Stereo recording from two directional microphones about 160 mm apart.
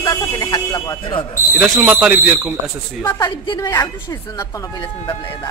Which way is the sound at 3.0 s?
25° left (ahead or behind).